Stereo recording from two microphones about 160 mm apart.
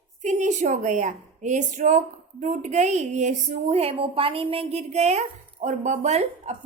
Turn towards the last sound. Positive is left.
turn(degrees=-45)  # may be behind; listen again after turning